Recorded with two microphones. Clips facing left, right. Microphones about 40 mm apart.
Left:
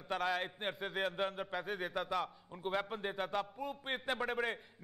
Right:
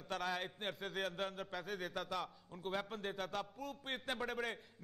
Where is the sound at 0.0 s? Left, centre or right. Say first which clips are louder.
Left 5 dB; centre.